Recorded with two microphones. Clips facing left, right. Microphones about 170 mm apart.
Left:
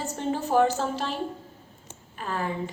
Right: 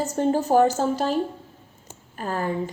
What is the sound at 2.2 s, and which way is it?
Speech, 40° right (ahead or behind).